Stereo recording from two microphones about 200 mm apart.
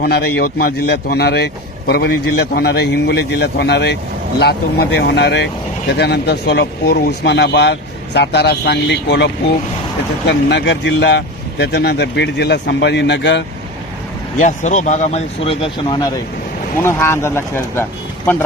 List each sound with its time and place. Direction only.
0.0 s a man's voice: 50° left (ahead or behind)
14.3 s speech: 35° left (ahead or behind); by 17.8 s 10° left (ahead or behind)